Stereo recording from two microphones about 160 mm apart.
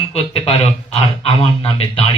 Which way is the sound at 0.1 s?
40° left (ahead or behind).